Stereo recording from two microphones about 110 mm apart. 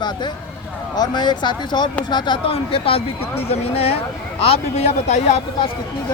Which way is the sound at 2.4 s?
60° left (ahead or behind).